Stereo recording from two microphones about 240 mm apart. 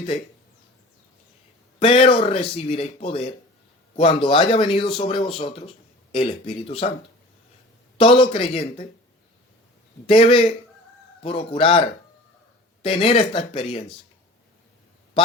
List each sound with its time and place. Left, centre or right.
1.8 s speech: left
7.9 s speech: left
10.1 s speech: left